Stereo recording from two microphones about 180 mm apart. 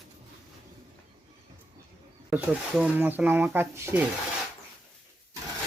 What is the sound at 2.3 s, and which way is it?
Speech, 10° right (ahead or behind).